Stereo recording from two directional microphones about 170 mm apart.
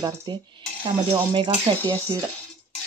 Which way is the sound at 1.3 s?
30° right (ahead or behind).